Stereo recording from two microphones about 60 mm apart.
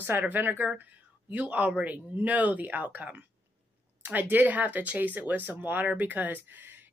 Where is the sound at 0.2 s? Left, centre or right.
Right.